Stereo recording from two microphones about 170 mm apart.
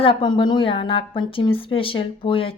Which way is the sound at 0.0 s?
30° left (ahead or behind).